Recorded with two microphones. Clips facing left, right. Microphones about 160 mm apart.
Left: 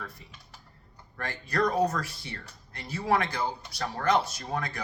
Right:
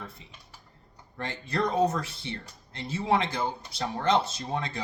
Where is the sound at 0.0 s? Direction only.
25° right (ahead or behind).